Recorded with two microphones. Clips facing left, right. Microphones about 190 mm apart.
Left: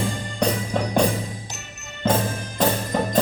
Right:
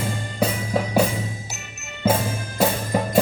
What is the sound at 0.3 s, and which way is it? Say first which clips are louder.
Music: even; 5° right (ahead or behind).